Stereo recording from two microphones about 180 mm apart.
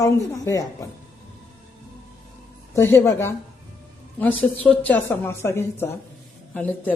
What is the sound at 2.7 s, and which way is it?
Speech, 15° left (ahead or behind).